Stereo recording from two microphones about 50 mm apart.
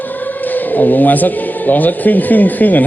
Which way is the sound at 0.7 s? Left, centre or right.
Left.